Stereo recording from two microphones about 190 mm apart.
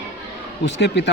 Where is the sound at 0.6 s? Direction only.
65° left (ahead or behind).